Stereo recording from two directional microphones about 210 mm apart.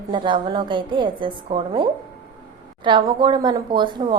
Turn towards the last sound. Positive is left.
turn(degrees=-20)  # may be behind; listen again after turning